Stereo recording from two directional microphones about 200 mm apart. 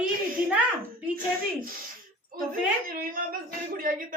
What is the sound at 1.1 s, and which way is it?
Speech, 45° right (ahead or behind).